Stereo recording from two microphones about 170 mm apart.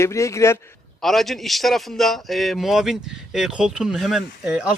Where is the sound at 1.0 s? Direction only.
Centre (ahead or behind).